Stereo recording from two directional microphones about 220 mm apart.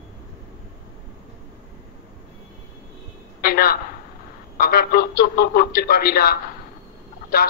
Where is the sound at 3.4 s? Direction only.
45° left (ahead or behind).